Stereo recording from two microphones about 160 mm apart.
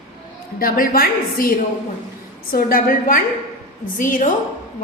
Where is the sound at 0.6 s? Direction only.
65° left (ahead or behind).